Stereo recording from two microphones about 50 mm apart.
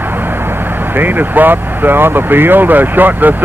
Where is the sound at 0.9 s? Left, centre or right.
Right.